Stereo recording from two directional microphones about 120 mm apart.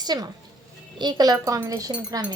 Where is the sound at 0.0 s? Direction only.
35° right (ahead or behind).